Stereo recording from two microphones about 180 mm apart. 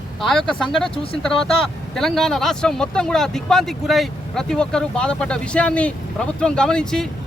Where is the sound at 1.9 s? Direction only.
Centre (ahead or behind).